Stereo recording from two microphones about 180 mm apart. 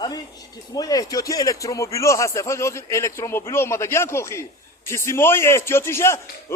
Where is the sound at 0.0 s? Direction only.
20° left (ahead or behind).